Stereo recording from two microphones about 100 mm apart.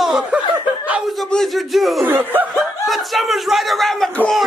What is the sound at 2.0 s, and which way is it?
Speech, 20° right (ahead or behind).